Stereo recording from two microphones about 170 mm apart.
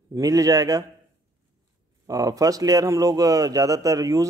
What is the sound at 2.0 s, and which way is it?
Speech, 20° right (ahead or behind).